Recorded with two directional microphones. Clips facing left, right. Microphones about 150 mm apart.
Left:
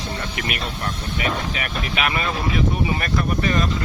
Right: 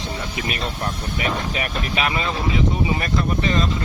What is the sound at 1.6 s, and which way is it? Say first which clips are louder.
Speech: right 1 dB; 40° right (ahead or behind).